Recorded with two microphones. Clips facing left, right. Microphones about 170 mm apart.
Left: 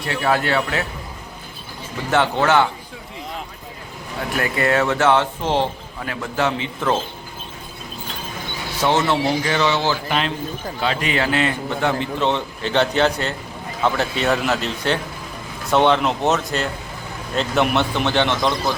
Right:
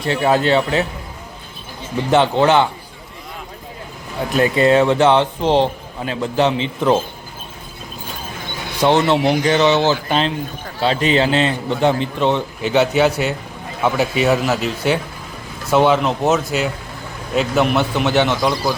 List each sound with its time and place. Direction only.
0.0 s a man's voice: 25° right (ahead or behind)
2.0 s a man's voice: 20° right (ahead or behind)
4.4 s a man's voice: 20° right (ahead or behind)
8.8 s a man's voice: 15° right (ahead or behind)